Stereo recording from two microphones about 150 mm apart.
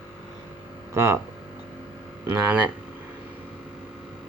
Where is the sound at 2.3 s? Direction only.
10° right (ahead or behind).